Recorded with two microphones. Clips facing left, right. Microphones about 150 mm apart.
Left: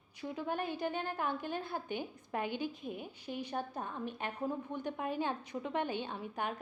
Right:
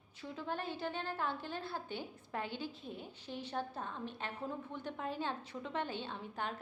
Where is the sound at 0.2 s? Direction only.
15° left (ahead or behind).